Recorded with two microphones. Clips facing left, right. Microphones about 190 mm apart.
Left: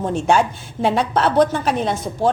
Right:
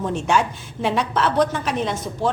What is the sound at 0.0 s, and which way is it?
A woman's voice, 35° left (ahead or behind).